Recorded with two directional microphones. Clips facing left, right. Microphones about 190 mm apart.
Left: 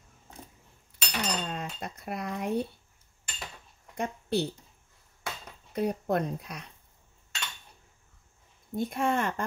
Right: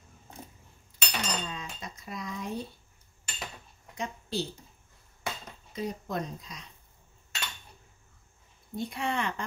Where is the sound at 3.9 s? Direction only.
60° left (ahead or behind).